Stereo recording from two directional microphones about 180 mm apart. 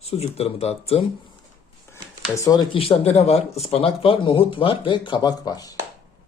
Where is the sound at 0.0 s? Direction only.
35° left (ahead or behind).